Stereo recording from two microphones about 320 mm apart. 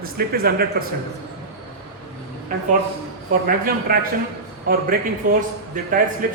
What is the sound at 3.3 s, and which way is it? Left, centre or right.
A man's voice, right.